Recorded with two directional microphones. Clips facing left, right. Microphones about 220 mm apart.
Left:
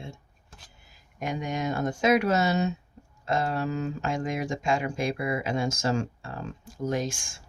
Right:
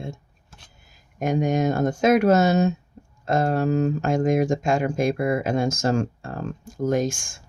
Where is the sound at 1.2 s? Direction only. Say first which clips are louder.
Right 9 dB; 45° right (ahead or behind).